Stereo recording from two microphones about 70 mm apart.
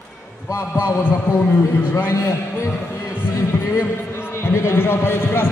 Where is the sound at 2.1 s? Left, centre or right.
Left.